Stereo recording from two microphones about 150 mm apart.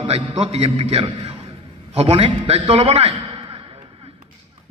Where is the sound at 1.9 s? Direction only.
35° right (ahead or behind).